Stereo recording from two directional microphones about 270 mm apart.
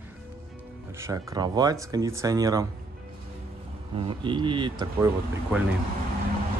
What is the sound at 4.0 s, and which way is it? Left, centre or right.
Speech, centre.